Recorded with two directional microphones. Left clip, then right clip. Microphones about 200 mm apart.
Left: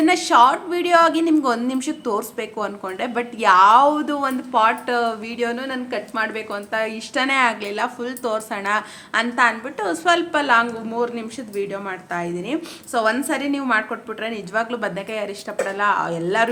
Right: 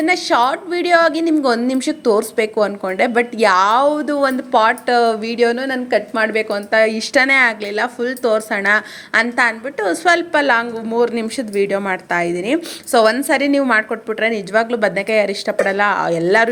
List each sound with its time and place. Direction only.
0.0 s a woman's voice: 20° right (ahead or behind)